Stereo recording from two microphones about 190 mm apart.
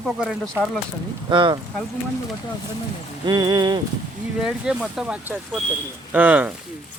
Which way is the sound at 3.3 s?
20° right (ahead or behind).